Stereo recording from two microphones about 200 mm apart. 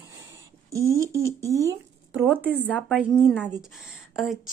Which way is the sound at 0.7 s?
15° right (ahead or behind).